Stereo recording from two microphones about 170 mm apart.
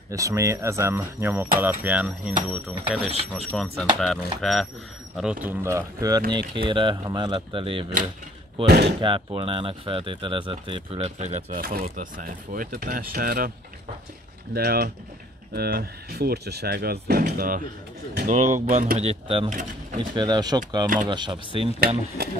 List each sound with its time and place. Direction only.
0.1 s speech: 20° right (ahead or behind)
8.6 s speech: 70° right (ahead or behind)
9.0 s speech: 30° right (ahead or behind); by 13.5 s 60° right (ahead or behind)
14.5 s speech: 65° right (ahead or behind); by 21.6 s 30° right (ahead or behind)
21.7 s speech: 65° right (ahead or behind)